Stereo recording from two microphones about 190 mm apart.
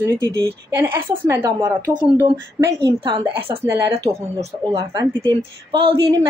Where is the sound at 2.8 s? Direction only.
25° right (ahead or behind).